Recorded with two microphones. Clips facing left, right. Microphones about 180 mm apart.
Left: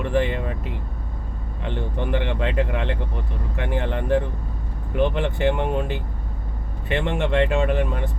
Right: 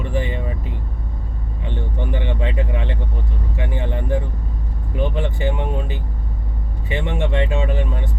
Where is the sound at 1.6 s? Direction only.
70° left (ahead or behind).